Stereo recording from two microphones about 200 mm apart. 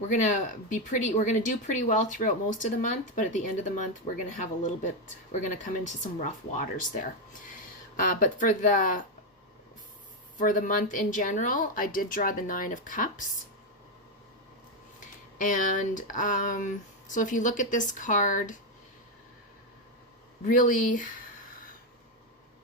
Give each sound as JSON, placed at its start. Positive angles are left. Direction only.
{"t": 0.1, "sound": "speech", "side_deg": 40}
{"t": 10.3, "sound": "speech", "side_deg": 40}
{"t": 15.4, "sound": "speech", "side_deg": 40}
{"t": 20.4, "sound": "speech", "side_deg": 40}